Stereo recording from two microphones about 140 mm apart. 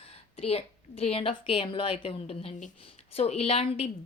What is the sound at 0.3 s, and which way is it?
A woman's voice, 45° left (ahead or behind).